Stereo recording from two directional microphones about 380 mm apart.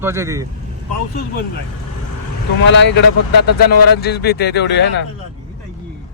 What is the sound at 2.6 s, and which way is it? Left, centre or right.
Speech, left.